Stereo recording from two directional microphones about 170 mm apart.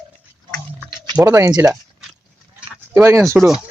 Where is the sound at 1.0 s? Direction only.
20° right (ahead or behind).